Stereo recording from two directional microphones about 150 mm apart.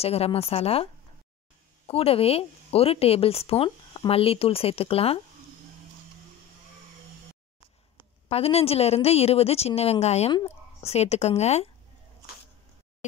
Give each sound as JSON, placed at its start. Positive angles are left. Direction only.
{"t": 0.0, "sound": "speech", "side_deg": 40}
{"t": 1.9, "sound": "speech", "side_deg": 40}
{"t": 8.3, "sound": "a woman's voice", "side_deg": 40}